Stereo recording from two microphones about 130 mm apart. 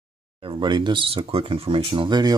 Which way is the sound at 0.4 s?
40° right (ahead or behind).